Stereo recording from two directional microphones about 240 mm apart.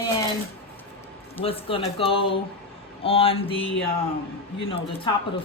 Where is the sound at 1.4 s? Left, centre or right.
Left.